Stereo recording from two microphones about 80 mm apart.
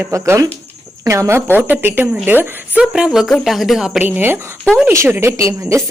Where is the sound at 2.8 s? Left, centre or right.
Centre.